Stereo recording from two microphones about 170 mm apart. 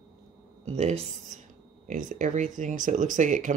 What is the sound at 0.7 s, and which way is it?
Speech, 40° right (ahead or behind).